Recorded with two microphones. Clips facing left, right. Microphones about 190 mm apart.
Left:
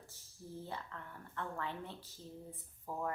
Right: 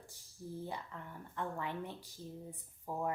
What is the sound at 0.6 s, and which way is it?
Speech, 15° right (ahead or behind).